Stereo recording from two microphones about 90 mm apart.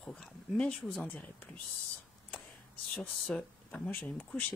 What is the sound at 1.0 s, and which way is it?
Speech, 20° left (ahead or behind).